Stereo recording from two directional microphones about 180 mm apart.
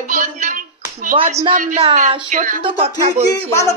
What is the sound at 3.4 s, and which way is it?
Speech, 15° left (ahead or behind).